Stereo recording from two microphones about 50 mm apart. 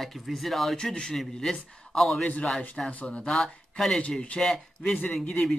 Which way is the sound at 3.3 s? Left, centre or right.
Centre.